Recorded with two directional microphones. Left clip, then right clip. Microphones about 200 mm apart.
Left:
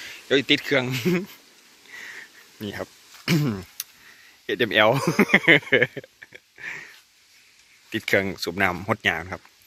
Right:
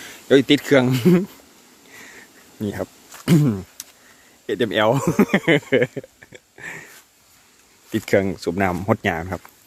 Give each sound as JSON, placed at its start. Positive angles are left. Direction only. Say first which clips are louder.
{"t": 0.0, "sound": "speech", "louder": "right 6 dB", "side_deg": -20}
{"t": 1.9, "sound": "sniff", "louder": "left 4 dB", "side_deg": -5}
{"t": 2.6, "sound": "a sound", "louder": "right 5 dB", "side_deg": -10}
{"t": 3.4, "sound": "speech", "louder": "right 5 dB", "side_deg": 0}